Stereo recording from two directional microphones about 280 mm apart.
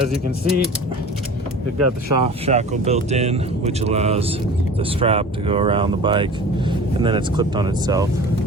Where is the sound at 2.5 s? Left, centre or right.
Right.